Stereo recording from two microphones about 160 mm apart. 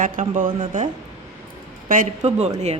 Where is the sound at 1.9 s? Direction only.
50° right (ahead or behind).